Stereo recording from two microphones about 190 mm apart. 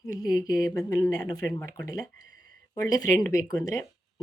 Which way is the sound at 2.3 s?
50° right (ahead or behind).